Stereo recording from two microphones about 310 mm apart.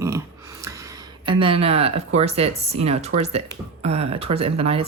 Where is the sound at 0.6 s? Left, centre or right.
Centre.